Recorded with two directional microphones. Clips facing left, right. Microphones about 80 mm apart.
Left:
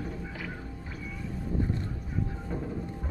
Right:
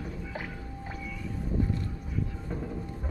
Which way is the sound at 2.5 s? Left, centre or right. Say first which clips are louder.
Left 1 dB; centre.